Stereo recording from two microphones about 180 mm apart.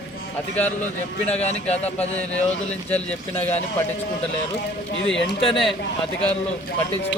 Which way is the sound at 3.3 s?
35° left (ahead or behind).